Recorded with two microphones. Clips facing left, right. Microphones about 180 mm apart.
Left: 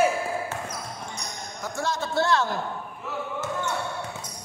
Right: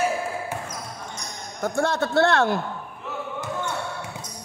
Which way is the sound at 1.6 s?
55° right (ahead or behind).